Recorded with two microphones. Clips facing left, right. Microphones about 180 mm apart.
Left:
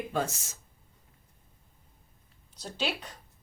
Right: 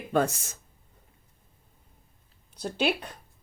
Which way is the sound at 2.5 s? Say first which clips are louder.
Right 7 dB; 55° right (ahead or behind).